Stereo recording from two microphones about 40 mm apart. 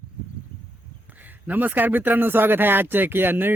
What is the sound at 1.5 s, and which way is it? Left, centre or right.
Speech, right.